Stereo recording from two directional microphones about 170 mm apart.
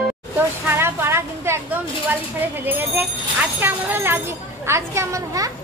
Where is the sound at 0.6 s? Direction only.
15° right (ahead or behind).